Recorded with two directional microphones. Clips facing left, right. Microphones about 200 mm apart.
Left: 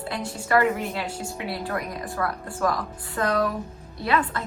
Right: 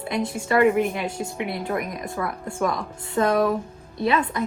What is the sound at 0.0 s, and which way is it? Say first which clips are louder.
A woman's voice: right 5 dB; 20° right (ahead or behind).